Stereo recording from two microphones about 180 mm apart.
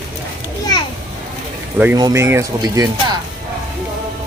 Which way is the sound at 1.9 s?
20° right (ahead or behind).